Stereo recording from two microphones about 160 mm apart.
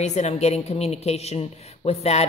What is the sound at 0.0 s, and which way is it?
A woman's voice, 45° left (ahead or behind).